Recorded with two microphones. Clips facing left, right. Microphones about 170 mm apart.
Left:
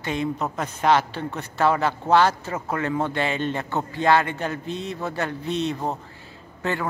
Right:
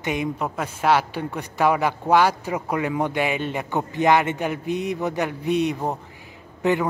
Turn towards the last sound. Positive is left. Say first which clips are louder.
# right 5 dB
turn(degrees=-15)  # may be behind; listen again after turning